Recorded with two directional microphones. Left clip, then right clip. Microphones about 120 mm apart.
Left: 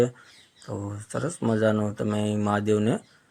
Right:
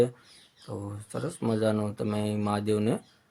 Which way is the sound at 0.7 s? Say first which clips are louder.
Left 4 dB; 20° left (ahead or behind).